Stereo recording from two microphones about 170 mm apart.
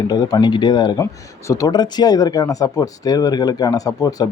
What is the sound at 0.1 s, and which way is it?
Speech, 20° left (ahead or behind).